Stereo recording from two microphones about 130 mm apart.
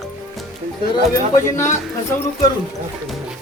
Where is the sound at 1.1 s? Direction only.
20° left (ahead or behind).